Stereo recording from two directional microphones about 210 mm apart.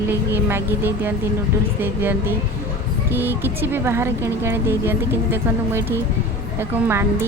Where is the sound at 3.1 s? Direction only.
10° right (ahead or behind).